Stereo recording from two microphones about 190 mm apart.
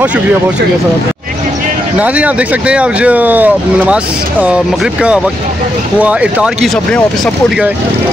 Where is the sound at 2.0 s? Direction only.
5° right (ahead or behind).